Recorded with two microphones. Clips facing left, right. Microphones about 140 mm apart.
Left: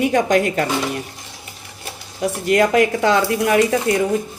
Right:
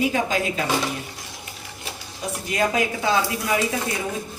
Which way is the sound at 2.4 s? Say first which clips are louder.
Left 8 dB; 70° left (ahead or behind).